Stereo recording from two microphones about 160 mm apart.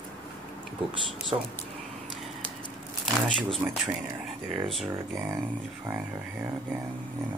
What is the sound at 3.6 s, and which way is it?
Speech, 10° right (ahead or behind).